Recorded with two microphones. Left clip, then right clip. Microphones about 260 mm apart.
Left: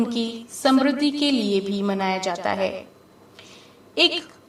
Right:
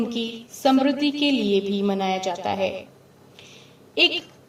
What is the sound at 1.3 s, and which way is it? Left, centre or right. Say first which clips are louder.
A woman's voice: right 1 dB; left.